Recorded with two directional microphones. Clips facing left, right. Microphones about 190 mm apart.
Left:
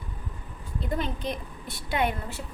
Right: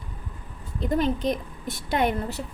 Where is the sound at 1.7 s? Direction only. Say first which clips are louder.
Right 3 dB; 40° right (ahead or behind).